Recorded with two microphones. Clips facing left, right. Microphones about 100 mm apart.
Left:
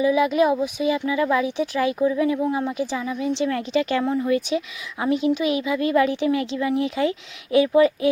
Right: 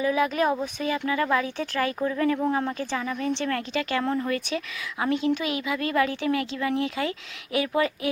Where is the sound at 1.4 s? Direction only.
15° left (ahead or behind).